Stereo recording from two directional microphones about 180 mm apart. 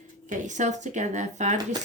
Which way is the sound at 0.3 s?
40° right (ahead or behind).